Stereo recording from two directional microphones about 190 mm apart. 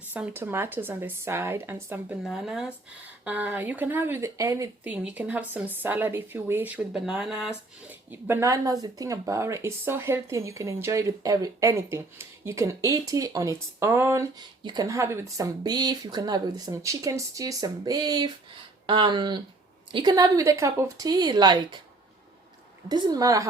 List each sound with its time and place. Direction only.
0.1 s speech: 10° right (ahead or behind)
22.9 s speech: 20° right (ahead or behind)